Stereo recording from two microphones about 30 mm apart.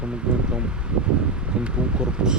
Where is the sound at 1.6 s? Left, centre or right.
Right.